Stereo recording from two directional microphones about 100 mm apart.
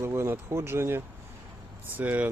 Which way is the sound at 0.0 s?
25° right (ahead or behind).